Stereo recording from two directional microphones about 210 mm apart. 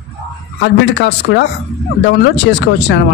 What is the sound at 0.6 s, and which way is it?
A man's voice, 55° left (ahead or behind).